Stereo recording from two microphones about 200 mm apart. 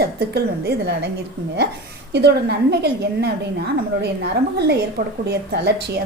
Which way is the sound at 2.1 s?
55° right (ahead or behind).